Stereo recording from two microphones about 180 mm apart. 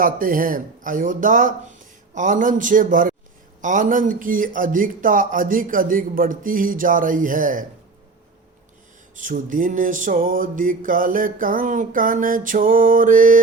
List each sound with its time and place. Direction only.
0.0 s music: 50° right (ahead or behind)
9.1 s music: 45° right (ahead or behind)